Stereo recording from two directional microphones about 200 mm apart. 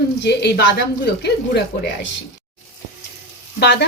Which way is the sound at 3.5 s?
55° left (ahead or behind).